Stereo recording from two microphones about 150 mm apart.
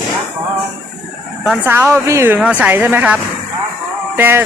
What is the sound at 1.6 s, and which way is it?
Speech, 15° right (ahead or behind).